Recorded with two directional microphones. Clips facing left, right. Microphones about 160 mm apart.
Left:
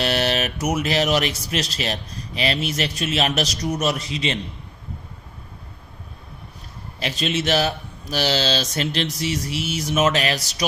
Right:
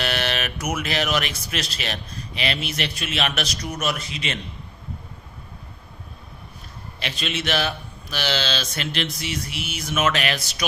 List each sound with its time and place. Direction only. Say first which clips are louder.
0.0 s speech: left 4 dB; 35° left (ahead or behind)
7.0 s speech: left 5 dB; 40° left (ahead or behind)